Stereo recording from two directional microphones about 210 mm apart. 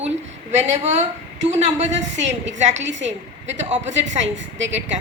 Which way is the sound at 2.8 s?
60° right (ahead or behind).